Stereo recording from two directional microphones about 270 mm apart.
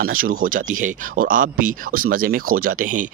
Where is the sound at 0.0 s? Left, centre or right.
Right.